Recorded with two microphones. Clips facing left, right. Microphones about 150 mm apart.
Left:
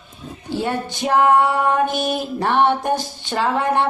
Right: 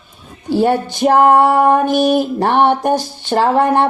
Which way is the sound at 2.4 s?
50° right (ahead or behind).